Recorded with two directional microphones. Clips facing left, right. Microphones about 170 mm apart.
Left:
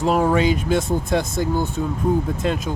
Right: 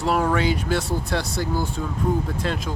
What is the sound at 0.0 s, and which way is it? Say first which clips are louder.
Speech: left 4 dB; 25° left (ahead or behind).